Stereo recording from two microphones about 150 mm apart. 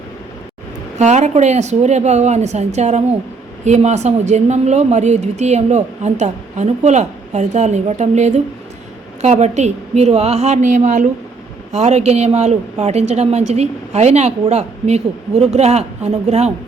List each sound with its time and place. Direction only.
0.9 s speech: 50° right (ahead or behind)